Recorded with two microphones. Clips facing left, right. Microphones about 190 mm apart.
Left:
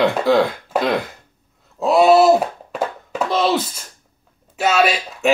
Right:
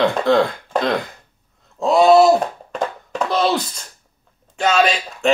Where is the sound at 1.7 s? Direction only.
5° left (ahead or behind).